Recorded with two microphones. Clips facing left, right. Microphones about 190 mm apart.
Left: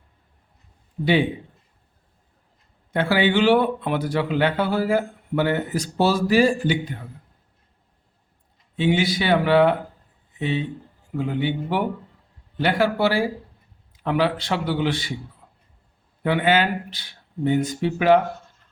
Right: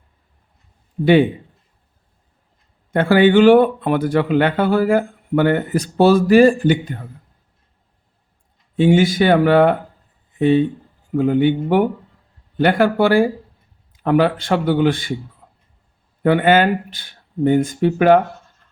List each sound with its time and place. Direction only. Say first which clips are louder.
2.9 s speech: right 7 dB; 50° right (ahead or behind)
8.7 s speech: right 7 dB; 45° right (ahead or behind)
16.2 s speech: right 6 dB; 50° right (ahead or behind)